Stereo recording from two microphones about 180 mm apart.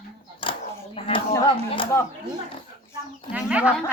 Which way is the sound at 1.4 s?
30° left (ahead or behind).